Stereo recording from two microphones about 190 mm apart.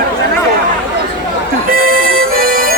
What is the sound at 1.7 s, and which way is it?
Music, 50° right (ahead or behind).